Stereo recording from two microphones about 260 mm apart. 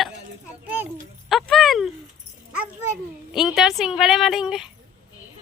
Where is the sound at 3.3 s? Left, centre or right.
Centre.